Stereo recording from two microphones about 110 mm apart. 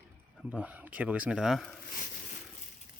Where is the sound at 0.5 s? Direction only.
15° right (ahead or behind).